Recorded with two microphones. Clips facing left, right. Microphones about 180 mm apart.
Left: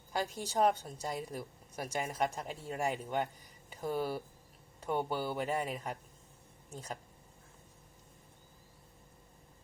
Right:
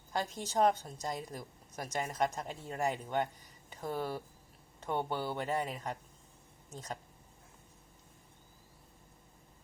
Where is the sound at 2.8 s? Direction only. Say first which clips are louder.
Right 1 dB; 35° right (ahead or behind).